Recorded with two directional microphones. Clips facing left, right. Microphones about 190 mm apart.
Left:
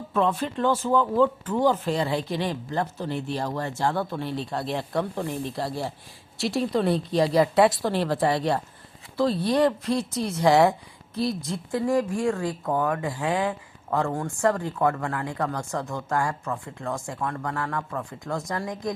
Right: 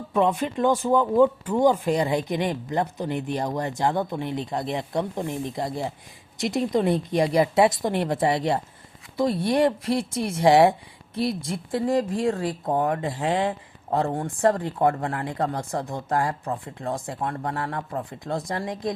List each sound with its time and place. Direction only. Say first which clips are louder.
0.1 s a woman's voice: right 2 dB; 15° right (ahead or behind)